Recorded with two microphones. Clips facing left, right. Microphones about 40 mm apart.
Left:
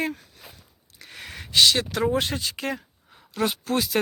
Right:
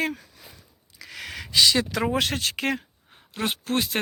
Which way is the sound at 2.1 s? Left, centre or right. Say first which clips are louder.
Even; right.